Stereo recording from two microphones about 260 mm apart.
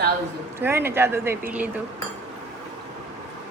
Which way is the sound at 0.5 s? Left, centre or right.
Centre.